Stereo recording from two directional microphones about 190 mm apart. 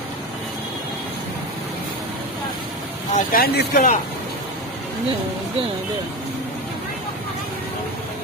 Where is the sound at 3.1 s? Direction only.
50° left (ahead or behind).